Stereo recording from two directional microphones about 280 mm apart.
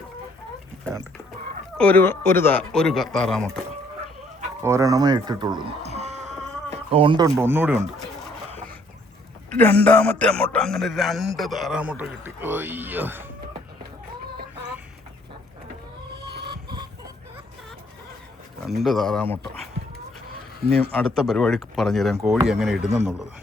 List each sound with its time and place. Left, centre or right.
1.8 s a man's voice: centre
4.6 s speech: centre
9.5 s a man's voice: centre
16.1 s vehicle: right
16.5 s chicken: centre
18.6 s a man's voice: centre
20.9 s a man's voice: centre